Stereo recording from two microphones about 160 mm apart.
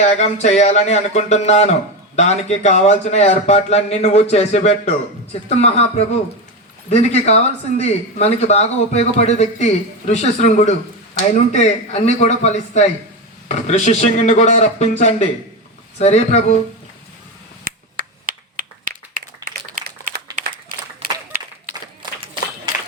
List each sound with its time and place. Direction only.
0.0 s speech: 45° left (ahead or behind)
6.9 s speech: 40° left (ahead or behind)
17.6 s finger snapping: 65° right (ahead or behind)
20.4 s a sound: 60° right (ahead or behind)